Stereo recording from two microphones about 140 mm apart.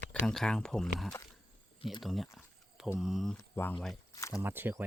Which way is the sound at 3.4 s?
15° left (ahead or behind).